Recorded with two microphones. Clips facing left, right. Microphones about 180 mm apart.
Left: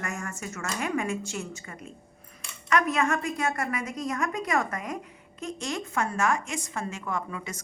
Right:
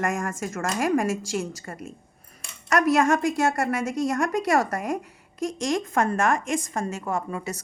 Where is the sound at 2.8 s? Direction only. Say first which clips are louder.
Right 6 dB; 85° right.